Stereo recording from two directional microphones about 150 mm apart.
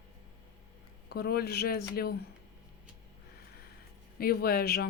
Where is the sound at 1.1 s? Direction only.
90° left.